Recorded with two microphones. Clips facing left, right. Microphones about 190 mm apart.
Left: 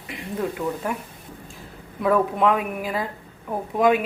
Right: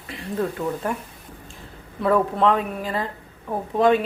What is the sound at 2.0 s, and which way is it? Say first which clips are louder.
Speech: right 1 dB; 10° left (ahead or behind).